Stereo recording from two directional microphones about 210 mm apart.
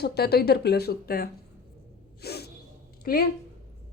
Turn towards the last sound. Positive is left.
turn(degrees=45)  # may be behind; listen again after turning